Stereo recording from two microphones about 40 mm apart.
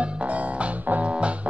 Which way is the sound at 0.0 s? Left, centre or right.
Right.